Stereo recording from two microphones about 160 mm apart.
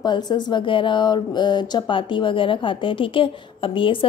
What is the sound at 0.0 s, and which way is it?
A woman's voice, 25° left (ahead or behind).